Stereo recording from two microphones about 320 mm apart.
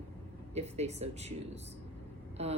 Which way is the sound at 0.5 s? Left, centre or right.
Centre.